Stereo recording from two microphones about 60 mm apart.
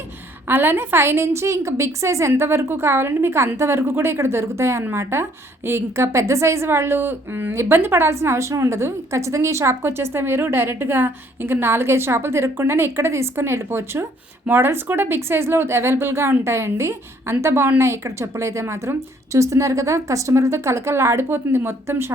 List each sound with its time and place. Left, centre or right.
0.4 s a woman's voice: right
6.1 s a woman's voice: right
6.7 s a woman's voice: right
21.2 s speech: right